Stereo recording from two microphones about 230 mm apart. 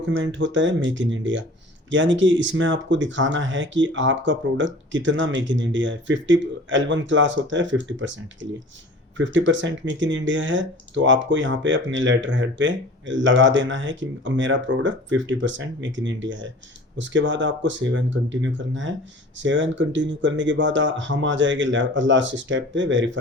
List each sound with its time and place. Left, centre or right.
0.0 s speech: right